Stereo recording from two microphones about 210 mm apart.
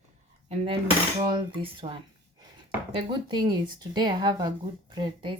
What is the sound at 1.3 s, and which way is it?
Speech, 20° right (ahead or behind).